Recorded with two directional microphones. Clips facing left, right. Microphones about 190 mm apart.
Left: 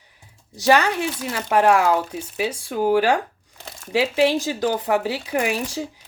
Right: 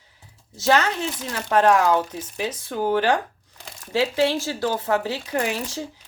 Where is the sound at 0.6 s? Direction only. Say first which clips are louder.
Left 3 dB; 15° left (ahead or behind).